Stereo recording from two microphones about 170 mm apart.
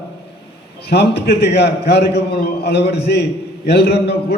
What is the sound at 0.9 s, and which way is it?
A man's voice, 70° left (ahead or behind).